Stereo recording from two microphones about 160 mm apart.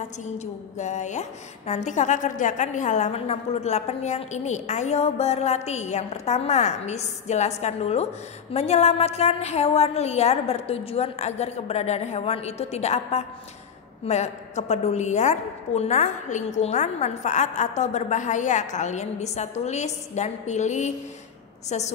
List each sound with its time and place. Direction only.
0.7 s a woman's voice: 45° left (ahead or behind)